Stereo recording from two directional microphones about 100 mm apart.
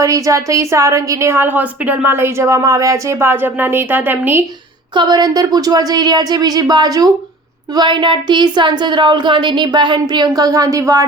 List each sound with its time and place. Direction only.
0.0 s a woman's voice: 35° right (ahead or behind)
4.9 s a woman's voice: 45° right (ahead or behind)